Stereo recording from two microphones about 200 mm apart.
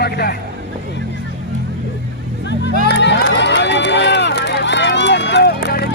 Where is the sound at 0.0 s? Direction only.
55° left (ahead or behind).